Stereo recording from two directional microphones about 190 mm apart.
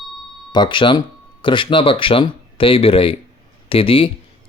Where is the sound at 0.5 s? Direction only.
25° left (ahead or behind).